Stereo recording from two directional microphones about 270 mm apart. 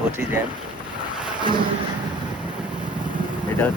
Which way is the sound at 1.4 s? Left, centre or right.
Centre.